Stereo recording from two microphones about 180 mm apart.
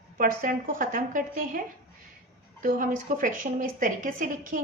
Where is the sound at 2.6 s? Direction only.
45° right (ahead or behind).